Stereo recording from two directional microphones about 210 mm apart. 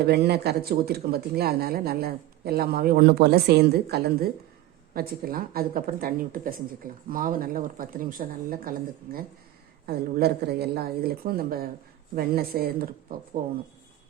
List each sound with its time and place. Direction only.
0.0 s speech: 50° right (ahead or behind)
9.8 s speech: 50° right (ahead or behind)